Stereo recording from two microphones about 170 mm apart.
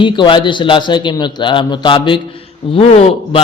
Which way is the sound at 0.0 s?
30° left (ahead or behind).